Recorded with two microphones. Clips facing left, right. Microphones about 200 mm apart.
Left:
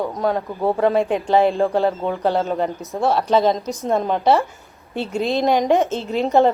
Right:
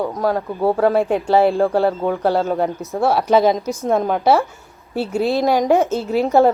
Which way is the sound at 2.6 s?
5° right (ahead or behind).